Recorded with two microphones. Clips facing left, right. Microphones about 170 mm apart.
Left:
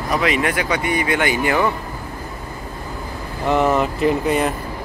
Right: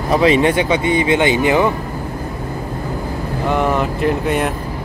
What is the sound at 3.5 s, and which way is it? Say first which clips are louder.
Speech: left 1 dB; centre (ahead or behind).